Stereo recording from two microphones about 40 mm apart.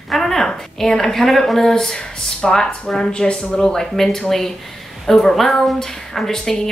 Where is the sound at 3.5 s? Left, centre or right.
Centre.